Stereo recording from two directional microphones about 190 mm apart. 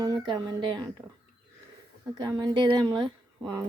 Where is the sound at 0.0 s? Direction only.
20° right (ahead or behind).